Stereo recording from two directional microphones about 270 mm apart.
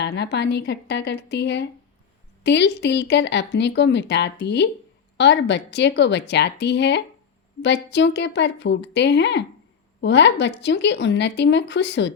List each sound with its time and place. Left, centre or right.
0.0 s speech: left